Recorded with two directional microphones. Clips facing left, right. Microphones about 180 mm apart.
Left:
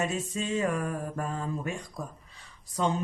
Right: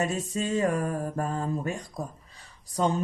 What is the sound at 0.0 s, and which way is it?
Speech, 40° right (ahead or behind).